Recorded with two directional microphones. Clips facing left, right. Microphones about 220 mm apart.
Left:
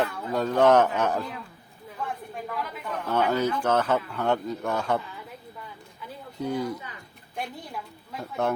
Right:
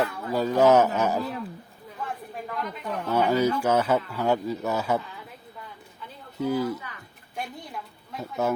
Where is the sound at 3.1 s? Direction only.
10° right (ahead or behind).